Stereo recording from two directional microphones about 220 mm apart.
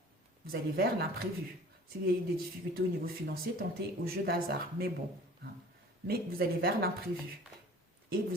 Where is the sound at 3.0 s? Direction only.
45° right (ahead or behind).